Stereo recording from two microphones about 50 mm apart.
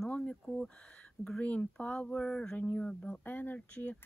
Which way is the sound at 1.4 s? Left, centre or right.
Left.